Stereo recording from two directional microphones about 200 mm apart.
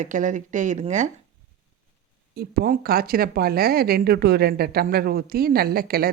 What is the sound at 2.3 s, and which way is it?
Speech, 50° right (ahead or behind).